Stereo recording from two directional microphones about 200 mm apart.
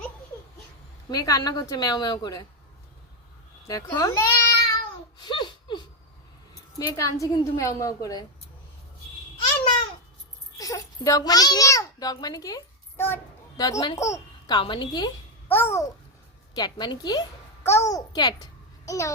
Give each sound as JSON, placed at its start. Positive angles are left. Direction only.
{"t": 1.1, "sound": "a woman's voice", "side_deg": 20}
{"t": 3.7, "sound": "child singing", "side_deg": 20}
{"t": 6.7, "sound": "a woman's voice", "side_deg": 15}
{"t": 10.6, "sound": "a child's voice", "side_deg": 15}
{"t": 15.4, "sound": "babbling", "side_deg": 10}
{"t": 16.6, "sound": "a child's voice", "side_deg": 20}